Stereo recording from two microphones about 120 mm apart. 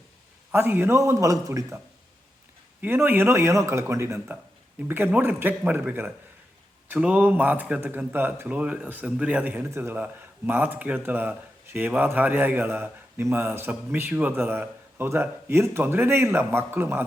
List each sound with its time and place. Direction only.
0.5 s speech: 20° right (ahead or behind)
2.8 s a man's voice: 15° right (ahead or behind)